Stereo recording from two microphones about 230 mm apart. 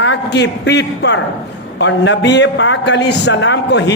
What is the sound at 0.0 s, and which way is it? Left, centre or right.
A man's voice, left.